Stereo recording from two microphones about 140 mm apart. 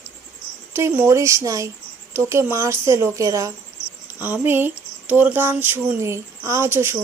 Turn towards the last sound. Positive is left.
turn(degrees=-15)  # may be behind; listen again after turning